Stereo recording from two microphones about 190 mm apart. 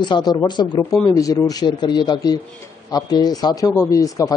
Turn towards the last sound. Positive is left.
turn(degrees=15)  # may be behind; listen again after turning